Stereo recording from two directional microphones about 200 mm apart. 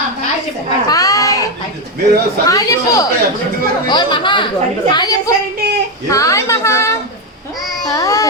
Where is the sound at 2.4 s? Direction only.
15° left (ahead or behind).